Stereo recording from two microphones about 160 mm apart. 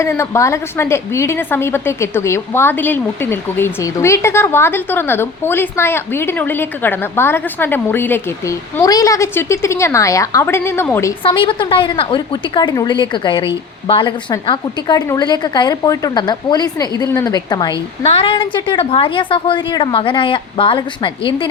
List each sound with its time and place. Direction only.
0.0 s a woman's voice: 15° left (ahead or behind)
11.2 s a woman's voice: 30° left (ahead or behind)
18.0 s a woman's voice: 35° left (ahead or behind)